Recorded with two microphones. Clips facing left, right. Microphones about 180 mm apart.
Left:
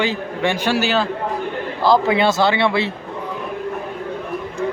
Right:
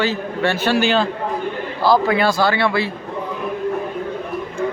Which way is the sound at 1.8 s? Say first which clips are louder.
Even; 20° left (ahead or behind).